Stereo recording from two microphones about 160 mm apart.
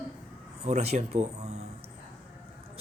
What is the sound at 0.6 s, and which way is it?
Speech, 40° right (ahead or behind).